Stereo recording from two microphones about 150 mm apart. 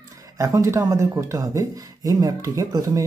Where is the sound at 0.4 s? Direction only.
20° right (ahead or behind).